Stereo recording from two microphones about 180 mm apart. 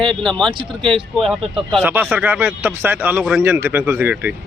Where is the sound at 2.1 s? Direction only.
10° right (ahead or behind).